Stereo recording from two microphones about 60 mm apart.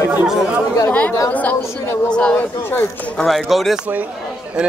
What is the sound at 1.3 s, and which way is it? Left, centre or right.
A woman's voice, left.